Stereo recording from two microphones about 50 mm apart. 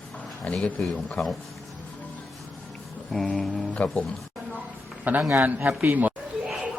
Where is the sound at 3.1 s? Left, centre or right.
Centre.